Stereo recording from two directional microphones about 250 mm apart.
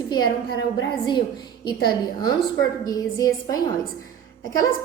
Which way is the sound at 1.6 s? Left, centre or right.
Centre.